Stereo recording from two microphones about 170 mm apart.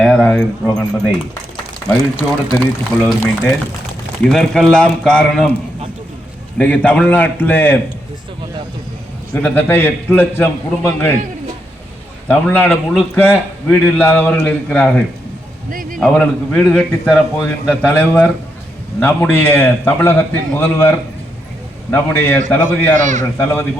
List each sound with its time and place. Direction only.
0.0 s speech: 5° left (ahead or behind)
3.1 s a man's voice: 5° left (ahead or behind)
6.6 s a man's voice: 10° left (ahead or behind)
9.3 s a man's voice: 10° left (ahead or behind)
12.3 s a man's voice: 10° left (ahead or behind)
15.7 s a sound: 55° right (ahead or behind)
16.0 s a man's voice: 5° left (ahead or behind)
23.0 s a man's voice: 45° right (ahead or behind)
23.4 s a man's voice: 15° left (ahead or behind)